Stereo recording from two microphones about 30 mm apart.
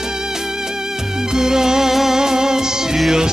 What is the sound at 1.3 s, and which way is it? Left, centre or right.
Music, centre.